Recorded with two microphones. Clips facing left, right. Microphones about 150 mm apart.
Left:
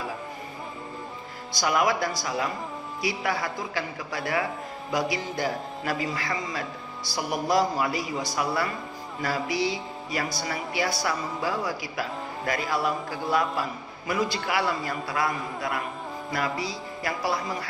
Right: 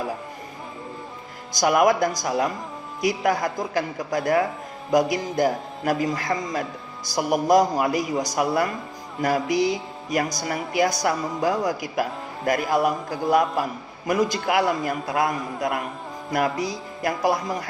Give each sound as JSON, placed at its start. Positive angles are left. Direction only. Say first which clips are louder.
{"t": 1.5, "sound": "speech", "louder": "right 6 dB", "side_deg": -50}
{"t": 16.6, "sound": "speech", "louder": "right 5 dB", "side_deg": -45}